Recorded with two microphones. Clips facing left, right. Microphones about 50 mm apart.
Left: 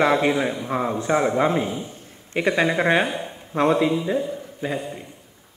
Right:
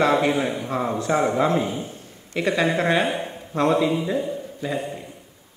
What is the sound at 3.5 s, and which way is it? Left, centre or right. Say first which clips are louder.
A man's voice: left 1 dB; left.